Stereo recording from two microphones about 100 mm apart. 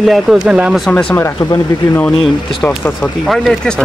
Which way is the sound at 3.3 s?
Centre (ahead or behind).